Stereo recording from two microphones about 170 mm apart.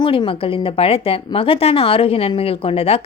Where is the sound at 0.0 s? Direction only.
30° left (ahead or behind).